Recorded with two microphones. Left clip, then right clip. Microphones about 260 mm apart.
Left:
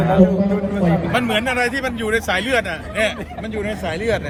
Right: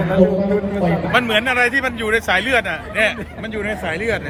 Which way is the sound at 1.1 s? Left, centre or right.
Centre.